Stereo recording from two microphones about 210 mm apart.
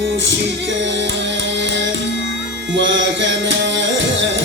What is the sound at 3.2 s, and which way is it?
Music, 60° right (ahead or behind).